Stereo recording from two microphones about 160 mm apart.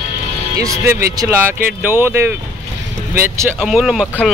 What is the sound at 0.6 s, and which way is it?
Speech, 20° right (ahead or behind).